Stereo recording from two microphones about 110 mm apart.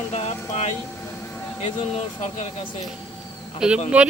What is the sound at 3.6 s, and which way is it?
Speech, 5° right (ahead or behind).